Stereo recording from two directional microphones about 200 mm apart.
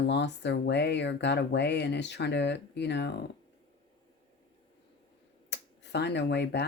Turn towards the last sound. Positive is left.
turn(degrees=60)  # may be behind; listen again after turning